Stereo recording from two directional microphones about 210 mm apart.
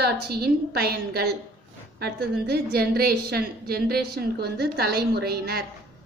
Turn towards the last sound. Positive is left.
turn(degrees=-50)  # may be behind; listen again after turning